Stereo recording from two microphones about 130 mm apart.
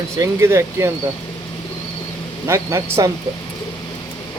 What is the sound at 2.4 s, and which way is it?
Speech, 20° right (ahead or behind).